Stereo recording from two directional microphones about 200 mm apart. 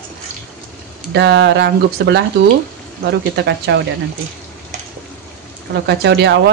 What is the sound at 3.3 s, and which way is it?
Speech, 60° right (ahead or behind).